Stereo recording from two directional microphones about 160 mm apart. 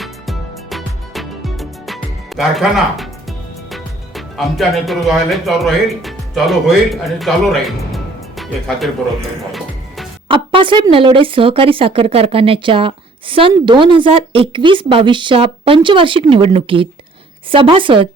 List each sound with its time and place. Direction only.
0.0 s music: centre (ahead or behind)
3.7 s speech: centre (ahead or behind)
9.5 s music: centre (ahead or behind)
10.2 s a woman's voice: 30° right (ahead or behind)